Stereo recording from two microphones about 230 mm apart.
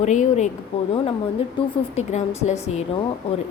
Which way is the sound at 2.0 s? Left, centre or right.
Left.